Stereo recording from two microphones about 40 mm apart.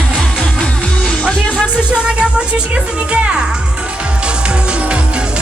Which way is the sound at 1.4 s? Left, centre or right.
Left.